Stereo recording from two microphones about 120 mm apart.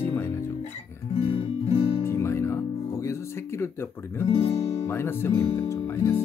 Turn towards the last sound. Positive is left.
turn(degrees=20)  # may be behind; listen again after turning